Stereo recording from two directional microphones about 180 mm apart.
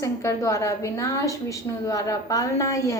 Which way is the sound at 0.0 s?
15° left (ahead or behind).